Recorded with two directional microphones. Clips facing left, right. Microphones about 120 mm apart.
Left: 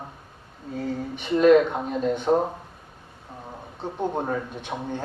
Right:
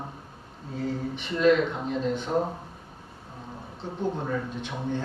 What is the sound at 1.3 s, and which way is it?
Speech, 50° left (ahead or behind).